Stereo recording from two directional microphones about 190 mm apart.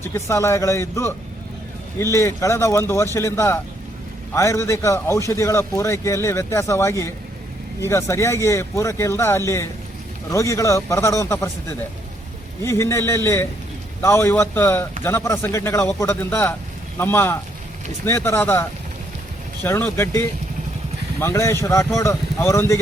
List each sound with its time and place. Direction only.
0.3 s a man's voice: 15° left (ahead or behind)
12.6 s a man's voice: 15° left (ahead or behind)
19.6 s a man's voice: 15° left (ahead or behind)